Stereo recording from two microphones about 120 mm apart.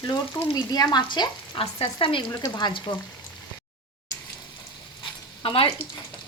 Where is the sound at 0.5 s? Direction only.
35° left (ahead or behind).